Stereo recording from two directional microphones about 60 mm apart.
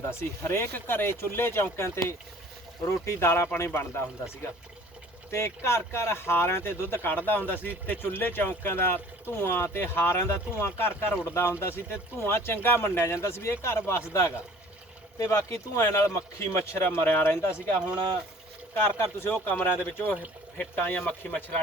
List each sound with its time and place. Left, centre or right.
0.1 s speech: left
0.7 s speech: left
5.3 s speech: left
15.2 s speech: left
16.9 s speech: left
17.5 s speech: centre
18.8 s speech: left